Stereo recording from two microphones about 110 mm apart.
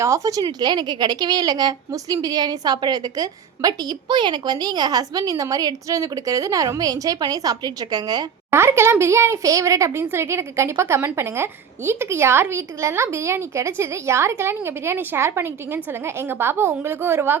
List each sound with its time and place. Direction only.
0.0 s a woman's voice: 30° right (ahead or behind)
8.4 s speech: 25° right (ahead or behind)